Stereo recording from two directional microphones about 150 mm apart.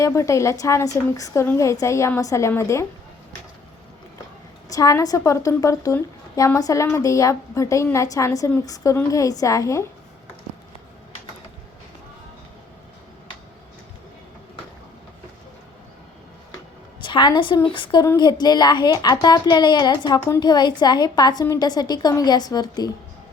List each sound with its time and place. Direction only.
0.0 s a woman's voice: 20° left (ahead or behind)
4.7 s a woman's voice: 20° left (ahead or behind)
17.0 s a woman's voice: 30° left (ahead or behind)